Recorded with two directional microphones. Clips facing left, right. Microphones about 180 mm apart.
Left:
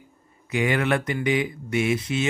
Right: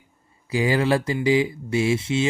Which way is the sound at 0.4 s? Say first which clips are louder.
Right 2 dB; 30° right (ahead or behind).